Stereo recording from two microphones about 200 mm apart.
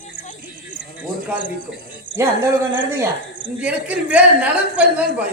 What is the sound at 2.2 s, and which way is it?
A man's voice, 15° right (ahead or behind).